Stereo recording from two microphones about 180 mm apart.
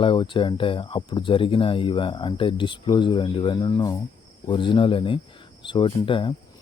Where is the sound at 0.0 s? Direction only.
25° left (ahead or behind).